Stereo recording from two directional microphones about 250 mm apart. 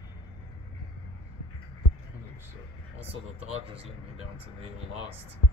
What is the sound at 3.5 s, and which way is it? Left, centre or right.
Speech, right.